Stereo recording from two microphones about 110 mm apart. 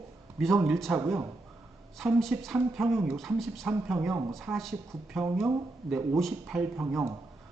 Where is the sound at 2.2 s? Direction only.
Centre (ahead or behind).